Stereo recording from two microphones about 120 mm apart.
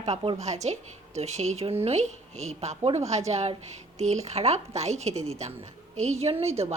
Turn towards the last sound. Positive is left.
turn(degrees=-60)  # may be behind; listen again after turning